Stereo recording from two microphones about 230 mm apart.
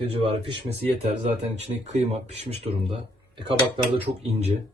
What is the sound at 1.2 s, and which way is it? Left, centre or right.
Speech, right.